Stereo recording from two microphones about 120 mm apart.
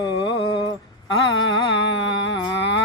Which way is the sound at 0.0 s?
45° left (ahead or behind).